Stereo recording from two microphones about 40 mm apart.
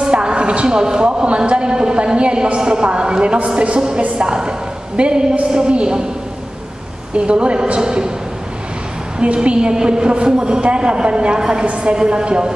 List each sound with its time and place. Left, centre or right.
0.0 s a woman's voice: right
7.2 s speech: right
9.2 s speech: right
11.6 s a woman's voice: right
11.9 s speech: right